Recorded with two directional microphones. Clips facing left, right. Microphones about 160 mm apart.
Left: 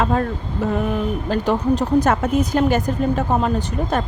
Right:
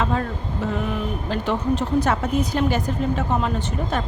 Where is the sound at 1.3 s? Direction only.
40° left (ahead or behind).